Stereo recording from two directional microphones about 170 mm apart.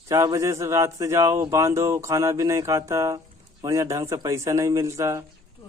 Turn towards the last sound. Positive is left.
turn(degrees=-15)  # may be behind; listen again after turning